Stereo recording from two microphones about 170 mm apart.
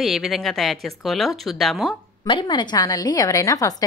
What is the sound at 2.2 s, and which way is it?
A woman's voice, 30° left (ahead or behind).